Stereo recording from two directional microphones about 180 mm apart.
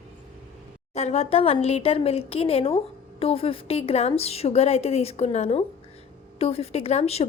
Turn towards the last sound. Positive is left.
turn(degrees=35)  # may be behind; listen again after turning